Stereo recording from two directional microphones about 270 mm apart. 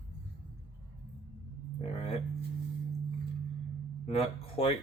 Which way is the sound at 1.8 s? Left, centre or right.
Left.